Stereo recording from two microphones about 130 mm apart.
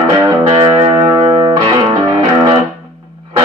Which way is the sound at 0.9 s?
20° right (ahead or behind).